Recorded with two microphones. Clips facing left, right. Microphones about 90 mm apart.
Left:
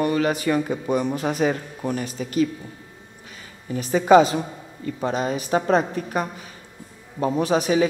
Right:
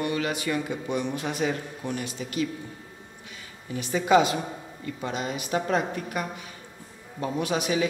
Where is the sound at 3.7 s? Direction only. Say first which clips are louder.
Left 6 dB; 40° left (ahead or behind).